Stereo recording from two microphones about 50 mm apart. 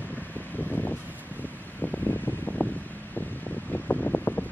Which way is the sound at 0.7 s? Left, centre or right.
Left.